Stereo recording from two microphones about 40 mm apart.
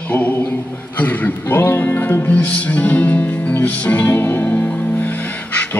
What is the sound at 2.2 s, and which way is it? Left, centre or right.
Music, left.